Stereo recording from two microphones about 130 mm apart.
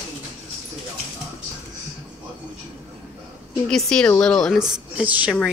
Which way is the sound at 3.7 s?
5° left (ahead or behind).